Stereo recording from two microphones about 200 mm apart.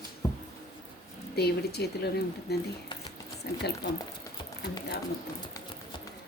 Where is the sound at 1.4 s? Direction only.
55° left (ahead or behind).